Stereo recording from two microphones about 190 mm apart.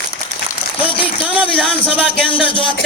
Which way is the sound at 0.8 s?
30° left (ahead or behind).